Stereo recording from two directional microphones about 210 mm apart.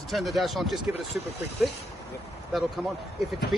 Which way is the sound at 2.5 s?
Centre (ahead or behind).